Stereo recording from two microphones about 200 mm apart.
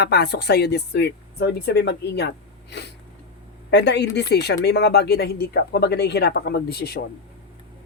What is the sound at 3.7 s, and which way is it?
Speech, 60° left (ahead or behind).